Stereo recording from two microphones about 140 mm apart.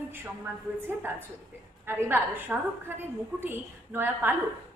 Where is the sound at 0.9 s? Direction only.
15° right (ahead or behind).